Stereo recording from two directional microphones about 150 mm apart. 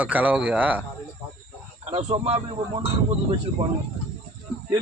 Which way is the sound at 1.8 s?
45° right (ahead or behind).